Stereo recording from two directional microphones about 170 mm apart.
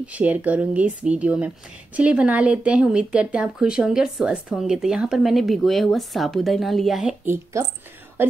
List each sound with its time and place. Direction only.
0.0 s speech: 10° right (ahead or behind)
7.6 s speech: 15° right (ahead or behind)